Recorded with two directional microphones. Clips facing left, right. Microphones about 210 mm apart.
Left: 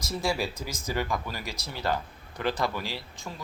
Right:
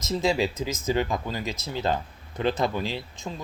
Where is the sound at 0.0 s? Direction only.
20° right (ahead or behind).